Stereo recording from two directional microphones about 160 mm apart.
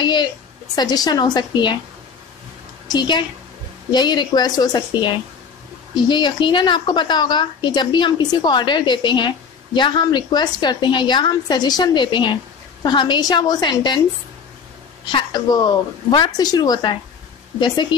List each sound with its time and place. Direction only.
0.0 s a woman's voice: 30° left (ahead or behind)
2.9 s a woman's voice: 30° left (ahead or behind)
15.0 s a woman's voice: 25° left (ahead or behind)